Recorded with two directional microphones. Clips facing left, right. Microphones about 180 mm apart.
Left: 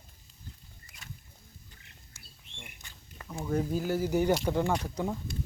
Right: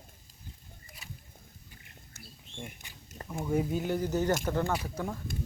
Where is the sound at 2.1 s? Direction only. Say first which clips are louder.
Right 6 dB; 50° right (ahead or behind).